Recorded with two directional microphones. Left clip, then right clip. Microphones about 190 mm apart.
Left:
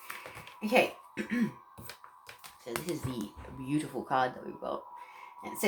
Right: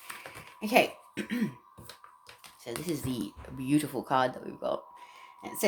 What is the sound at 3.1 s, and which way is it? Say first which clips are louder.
Speech: right 3 dB; 50° right (ahead or behind).